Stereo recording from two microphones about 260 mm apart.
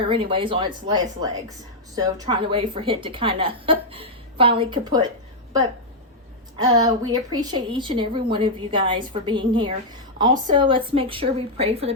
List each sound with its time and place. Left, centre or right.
0.1 s a woman's voice: centre
6.6 s a woman's voice: centre